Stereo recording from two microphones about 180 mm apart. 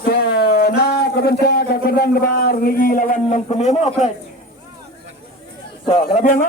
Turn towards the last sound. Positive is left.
turn(degrees=45)  # may be behind; listen again after turning